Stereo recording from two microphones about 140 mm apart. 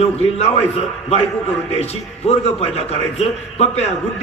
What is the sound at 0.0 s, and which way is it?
Speech, 50° left (ahead or behind).